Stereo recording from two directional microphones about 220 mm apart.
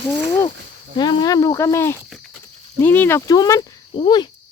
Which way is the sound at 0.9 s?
20° left (ahead or behind).